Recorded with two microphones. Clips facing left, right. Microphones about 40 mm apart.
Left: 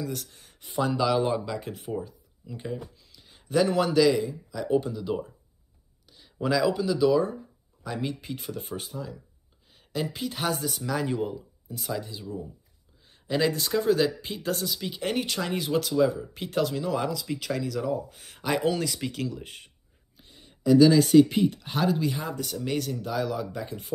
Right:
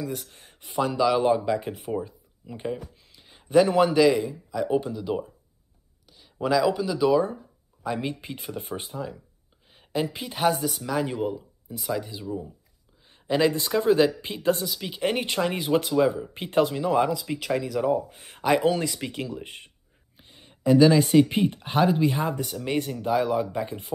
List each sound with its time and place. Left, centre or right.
0.0 s speech: centre
0.3 s a sound: right
0.7 s speech: centre
1.3 s speech: centre
6.0 s a sound: centre
6.4 s speech: centre
7.8 s speech: right
13.0 s a sound: centre
13.6 s speech: right
14.5 s speech: centre
18.4 s speech: centre
20.2 s speech: right
22.4 s speech: centre
22.7 s speech: right